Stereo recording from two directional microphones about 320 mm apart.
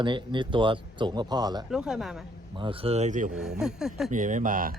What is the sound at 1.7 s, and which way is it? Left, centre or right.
Speech, centre.